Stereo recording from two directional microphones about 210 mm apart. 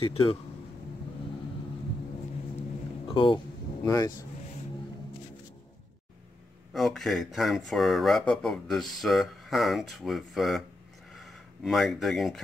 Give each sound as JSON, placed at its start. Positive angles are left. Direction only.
{"t": 0.0, "sound": "speech", "side_deg": 25}
{"t": 3.1, "sound": "a sound", "side_deg": 25}
{"t": 3.8, "sound": "speech", "side_deg": 15}
{"t": 6.7, "sound": "speech", "side_deg": 0}